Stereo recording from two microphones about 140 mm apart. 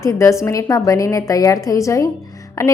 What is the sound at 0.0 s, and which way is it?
A woman's voice, 20° left (ahead or behind).